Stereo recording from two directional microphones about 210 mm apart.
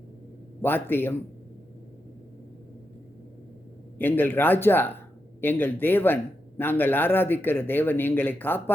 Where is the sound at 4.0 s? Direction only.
10° left (ahead or behind).